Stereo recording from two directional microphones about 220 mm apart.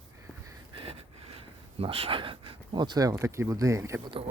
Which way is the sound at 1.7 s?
25° right (ahead or behind).